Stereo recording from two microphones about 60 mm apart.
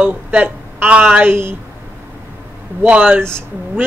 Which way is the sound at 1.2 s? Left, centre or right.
Right.